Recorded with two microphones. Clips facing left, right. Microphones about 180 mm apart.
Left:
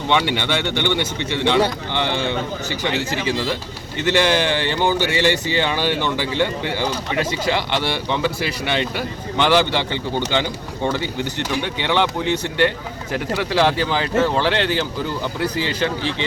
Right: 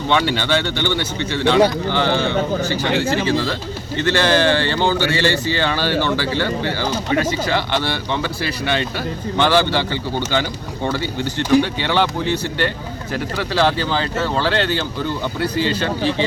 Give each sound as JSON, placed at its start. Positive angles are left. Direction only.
{"t": 0.1, "sound": "speech", "side_deg": 20}